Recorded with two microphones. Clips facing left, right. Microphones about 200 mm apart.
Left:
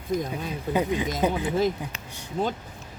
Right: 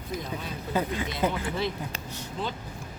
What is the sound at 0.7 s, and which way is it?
Speech, 15° left (ahead or behind).